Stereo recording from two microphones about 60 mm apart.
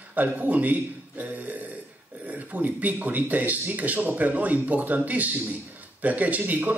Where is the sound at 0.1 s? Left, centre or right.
Right.